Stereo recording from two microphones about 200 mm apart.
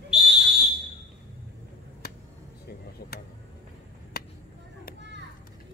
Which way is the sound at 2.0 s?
50° left (ahead or behind).